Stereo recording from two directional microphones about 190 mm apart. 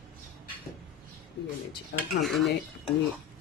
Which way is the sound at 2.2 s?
Centre (ahead or behind).